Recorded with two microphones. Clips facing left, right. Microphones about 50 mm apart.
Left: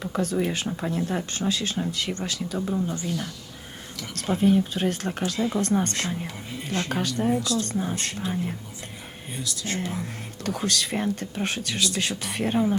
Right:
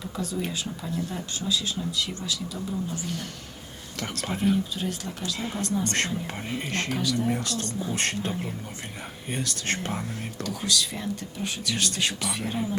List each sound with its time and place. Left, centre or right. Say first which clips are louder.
0.0 s speech: left 6 dB; left
4.3 s speech: left 5 dB; left
6.2 s speech: right 2 dB; right
6.8 s speech: even; left
7.3 s speech: left 4 dB; right
7.7 s speech: left 3 dB; left
7.9 s speech: right 3 dB; right
9.3 s speech: right 1 dB; right
10.4 s speech: left 2 dB; left